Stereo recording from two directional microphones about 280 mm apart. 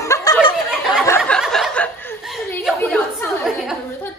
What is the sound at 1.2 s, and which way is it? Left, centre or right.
A woman's voice, centre.